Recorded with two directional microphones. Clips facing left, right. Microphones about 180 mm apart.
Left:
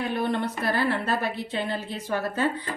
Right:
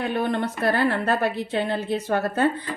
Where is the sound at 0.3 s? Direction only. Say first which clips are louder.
Right 3 dB; 60° right (ahead or behind).